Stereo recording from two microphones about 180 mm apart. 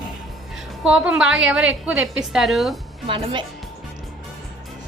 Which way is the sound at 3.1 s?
30° right (ahead or behind).